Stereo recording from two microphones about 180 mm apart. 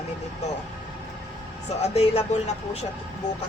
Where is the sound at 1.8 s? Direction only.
35° left (ahead or behind).